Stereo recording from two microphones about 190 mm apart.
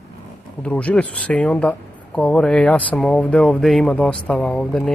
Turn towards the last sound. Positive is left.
turn(degrees=5)  # may be behind; listen again after turning